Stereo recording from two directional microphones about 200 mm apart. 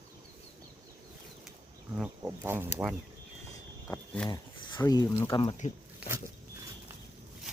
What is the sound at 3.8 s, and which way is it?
Speech, 10° left (ahead or behind).